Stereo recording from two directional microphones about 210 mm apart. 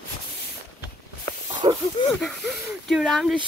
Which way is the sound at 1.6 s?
25° right (ahead or behind).